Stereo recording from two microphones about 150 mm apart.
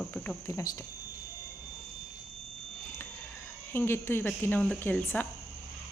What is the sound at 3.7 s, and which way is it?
Speech, 15° left (ahead or behind).